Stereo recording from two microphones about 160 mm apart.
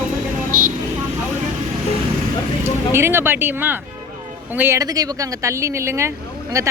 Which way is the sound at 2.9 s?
15° right (ahead or behind).